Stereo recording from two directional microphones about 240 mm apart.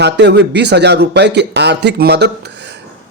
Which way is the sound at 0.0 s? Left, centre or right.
Right.